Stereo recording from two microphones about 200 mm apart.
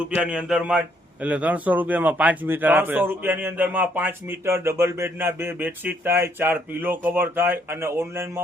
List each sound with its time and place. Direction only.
0.2 s a man's voice: 5° right (ahead or behind)